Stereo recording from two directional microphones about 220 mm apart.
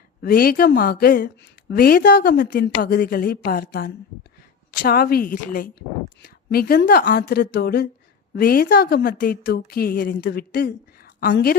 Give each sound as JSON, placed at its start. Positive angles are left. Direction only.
{"t": 0.2, "sound": "a woman's voice", "side_deg": 40}